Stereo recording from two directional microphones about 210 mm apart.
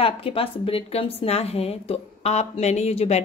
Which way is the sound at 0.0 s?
25° left (ahead or behind).